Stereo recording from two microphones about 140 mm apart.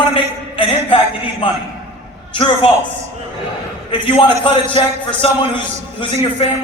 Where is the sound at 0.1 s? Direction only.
40° left (ahead or behind).